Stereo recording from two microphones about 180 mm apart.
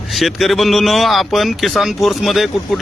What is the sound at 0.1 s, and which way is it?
Speech, centre (ahead or behind).